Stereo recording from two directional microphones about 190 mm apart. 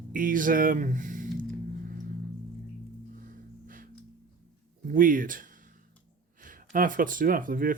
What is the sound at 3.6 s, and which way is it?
Music, 45° right (ahead or behind).